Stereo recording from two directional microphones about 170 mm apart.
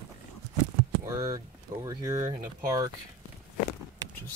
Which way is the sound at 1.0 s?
20° right (ahead or behind).